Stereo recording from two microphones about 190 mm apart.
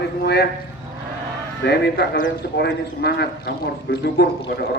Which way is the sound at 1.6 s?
60° left (ahead or behind).